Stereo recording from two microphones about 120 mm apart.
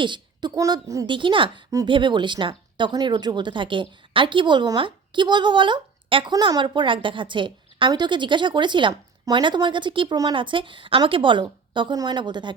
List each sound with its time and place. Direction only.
0.0 s speech: 40° right (ahead or behind)
1.0 s a woman's voice: 45° right (ahead or behind)
6.3 s a woman's voice: 35° right (ahead or behind)